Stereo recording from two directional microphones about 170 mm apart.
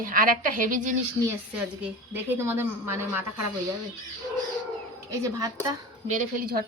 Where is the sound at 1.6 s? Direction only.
10° right (ahead or behind).